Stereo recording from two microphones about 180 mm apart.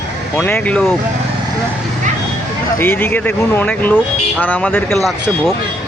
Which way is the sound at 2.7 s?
10° left (ahead or behind).